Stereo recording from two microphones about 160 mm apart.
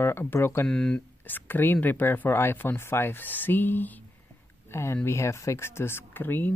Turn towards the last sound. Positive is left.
turn(degrees=10)  # may be behind; listen again after turning